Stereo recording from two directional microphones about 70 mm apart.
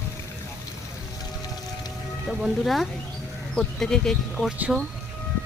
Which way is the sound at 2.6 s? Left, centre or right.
Centre.